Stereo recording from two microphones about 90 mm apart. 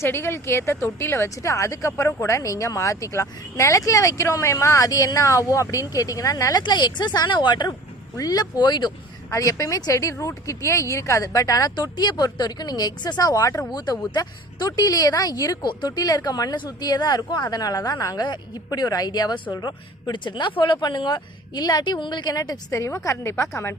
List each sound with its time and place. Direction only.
0.0 s speech: 25° left (ahead or behind); by 7.8 s 55° left (ahead or behind)
8.1 s speech: 45° left (ahead or behind)
9.3 s speech: 40° left (ahead or behind)